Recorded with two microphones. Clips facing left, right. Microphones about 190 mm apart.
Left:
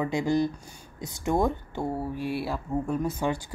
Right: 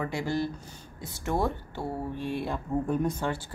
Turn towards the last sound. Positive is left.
turn(degrees=10)  # may be behind; listen again after turning